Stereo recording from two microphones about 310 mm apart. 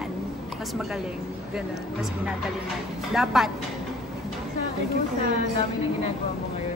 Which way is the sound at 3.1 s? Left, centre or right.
Centre.